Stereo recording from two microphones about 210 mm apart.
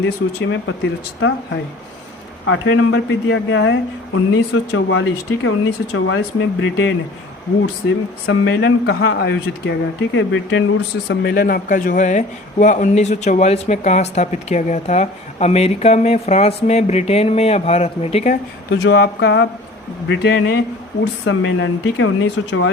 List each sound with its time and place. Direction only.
0.0 s a man's voice: 60° left (ahead or behind)
2.5 s a man's voice: 65° left (ahead or behind)
8.3 s a man's voice: 60° left (ahead or behind)
11.1 s speech: 50° left (ahead or behind); by 18.3 s 30° left (ahead or behind)
18.7 s a man's voice: 55° left (ahead or behind)